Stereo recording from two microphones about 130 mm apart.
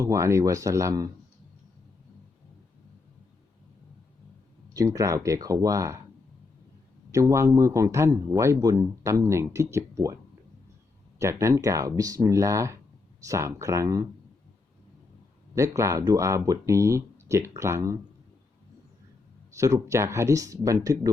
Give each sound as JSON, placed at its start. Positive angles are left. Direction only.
{"t": 0.0, "sound": "a man's voice", "side_deg": -25}
{"t": 4.7, "sound": "a man's voice", "side_deg": -25}
{"t": 7.1, "sound": "a man's voice", "side_deg": -25}
{"t": 11.2, "sound": "a man's voice", "side_deg": -25}
{"t": 15.5, "sound": "a man's voice", "side_deg": -20}
{"t": 19.5, "sound": "a man's voice", "side_deg": -25}